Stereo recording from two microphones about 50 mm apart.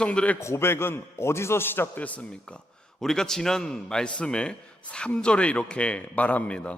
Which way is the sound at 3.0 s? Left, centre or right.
Centre.